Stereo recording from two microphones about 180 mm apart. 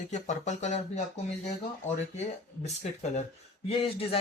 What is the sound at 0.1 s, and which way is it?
A man's voice, 40° left (ahead or behind).